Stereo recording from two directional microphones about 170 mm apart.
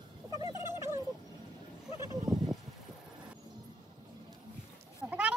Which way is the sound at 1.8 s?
25° left (ahead or behind).